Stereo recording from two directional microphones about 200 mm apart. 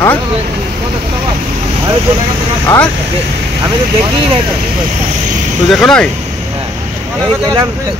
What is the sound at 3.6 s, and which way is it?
Speech, 25° right (ahead or behind).